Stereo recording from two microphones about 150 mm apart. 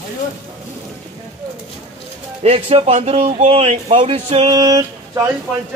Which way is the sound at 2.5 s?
40° right (ahead or behind).